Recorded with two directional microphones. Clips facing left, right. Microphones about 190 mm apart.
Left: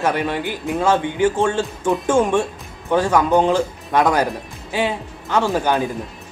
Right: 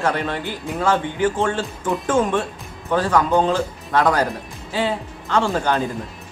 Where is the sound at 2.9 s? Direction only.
15° left (ahead or behind).